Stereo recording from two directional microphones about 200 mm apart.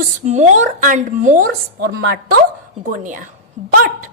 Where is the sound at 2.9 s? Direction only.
40° right (ahead or behind).